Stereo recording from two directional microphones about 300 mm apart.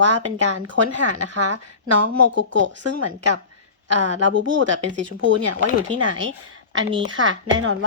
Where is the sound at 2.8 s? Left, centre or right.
Right.